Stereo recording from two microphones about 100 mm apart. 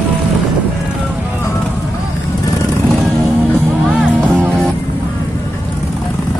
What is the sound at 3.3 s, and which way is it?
Music, 15° right (ahead or behind).